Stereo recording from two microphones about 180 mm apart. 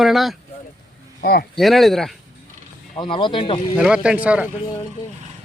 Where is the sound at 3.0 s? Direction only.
25° left (ahead or behind).